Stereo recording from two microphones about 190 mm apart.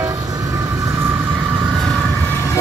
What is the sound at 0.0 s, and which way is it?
Train, 15° right (ahead or behind).